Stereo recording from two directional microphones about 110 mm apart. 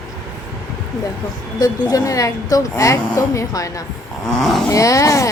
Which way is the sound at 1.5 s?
35° left (ahead or behind).